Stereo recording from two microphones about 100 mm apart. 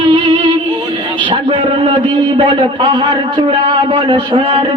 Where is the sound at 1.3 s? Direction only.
60° right (ahead or behind).